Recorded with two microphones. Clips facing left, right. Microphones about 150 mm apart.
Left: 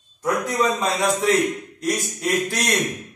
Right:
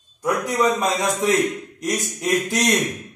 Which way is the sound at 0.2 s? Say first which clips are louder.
Right 1 dB; 15° right (ahead or behind).